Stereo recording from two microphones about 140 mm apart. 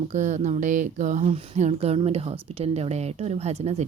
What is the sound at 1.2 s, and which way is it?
Speech, 50° right (ahead or behind).